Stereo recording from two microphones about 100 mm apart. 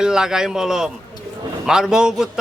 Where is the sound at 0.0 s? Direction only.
5° right (ahead or behind).